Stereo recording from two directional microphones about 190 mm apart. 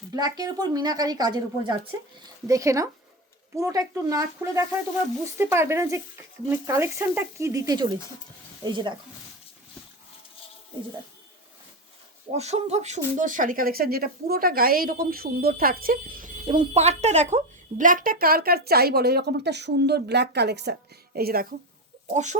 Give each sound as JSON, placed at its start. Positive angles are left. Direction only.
{"t": 0.1, "sound": "speech", "side_deg": -20}
{"t": 12.3, "sound": "speech", "side_deg": -35}
{"t": 22.1, "sound": "chicken", "side_deg": -40}